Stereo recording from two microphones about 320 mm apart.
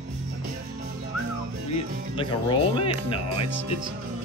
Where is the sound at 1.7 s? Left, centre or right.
Centre.